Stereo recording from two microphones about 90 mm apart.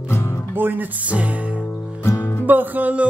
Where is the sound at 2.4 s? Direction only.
20° right (ahead or behind).